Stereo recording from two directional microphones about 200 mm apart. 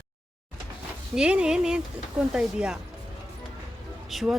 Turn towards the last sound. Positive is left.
turn(degrees=0)  # may be behind; listen again after turning